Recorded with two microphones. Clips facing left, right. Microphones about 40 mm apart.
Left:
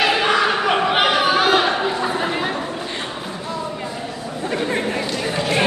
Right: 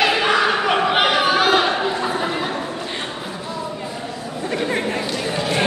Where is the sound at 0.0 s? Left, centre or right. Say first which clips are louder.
Even; centre.